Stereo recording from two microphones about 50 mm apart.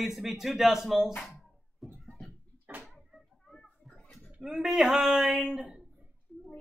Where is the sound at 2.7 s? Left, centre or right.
Right.